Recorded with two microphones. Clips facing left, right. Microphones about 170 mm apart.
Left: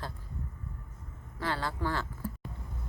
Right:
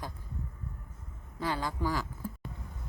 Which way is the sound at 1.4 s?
15° right (ahead or behind).